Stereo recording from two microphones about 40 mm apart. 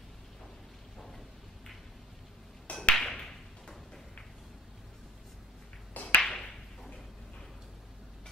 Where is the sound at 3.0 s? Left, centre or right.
Centre.